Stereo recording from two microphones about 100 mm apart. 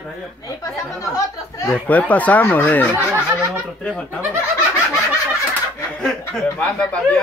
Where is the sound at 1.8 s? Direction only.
15° left (ahead or behind).